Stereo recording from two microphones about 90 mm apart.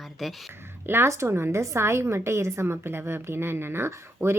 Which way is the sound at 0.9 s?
30° right (ahead or behind).